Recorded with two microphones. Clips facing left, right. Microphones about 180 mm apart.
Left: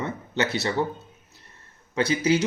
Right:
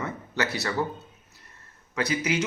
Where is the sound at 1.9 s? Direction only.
25° left (ahead or behind).